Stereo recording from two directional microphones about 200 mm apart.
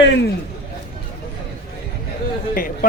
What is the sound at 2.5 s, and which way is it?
Speech, 45° left (ahead or behind).